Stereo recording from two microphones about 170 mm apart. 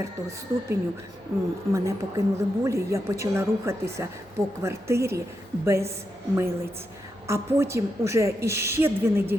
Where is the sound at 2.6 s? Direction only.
15° right (ahead or behind).